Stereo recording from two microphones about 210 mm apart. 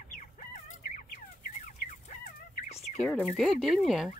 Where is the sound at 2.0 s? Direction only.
35° left (ahead or behind).